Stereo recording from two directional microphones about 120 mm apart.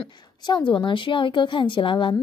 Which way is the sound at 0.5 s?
40° left (ahead or behind).